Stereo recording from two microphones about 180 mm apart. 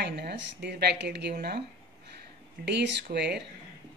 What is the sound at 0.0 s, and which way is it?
A woman's voice, 65° right (ahead or behind).